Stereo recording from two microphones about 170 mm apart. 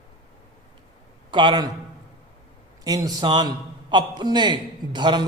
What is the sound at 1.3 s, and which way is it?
Speech, 30° right (ahead or behind).